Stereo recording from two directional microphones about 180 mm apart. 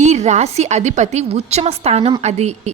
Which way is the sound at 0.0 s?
40° right (ahead or behind).